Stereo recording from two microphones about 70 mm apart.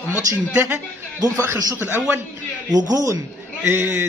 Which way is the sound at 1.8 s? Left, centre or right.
Right.